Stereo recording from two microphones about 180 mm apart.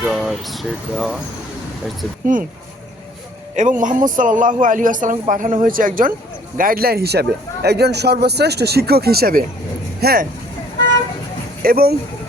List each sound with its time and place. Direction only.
0.0 s speech: centre (ahead or behind)
2.3 s a man's voice: 50° right (ahead or behind)
3.5 s a man's voice: 45° right (ahead or behind)
11.6 s a man's voice: 55° right (ahead or behind)